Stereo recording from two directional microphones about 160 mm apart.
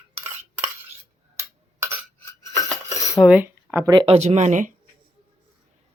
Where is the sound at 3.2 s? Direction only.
20° left (ahead or behind).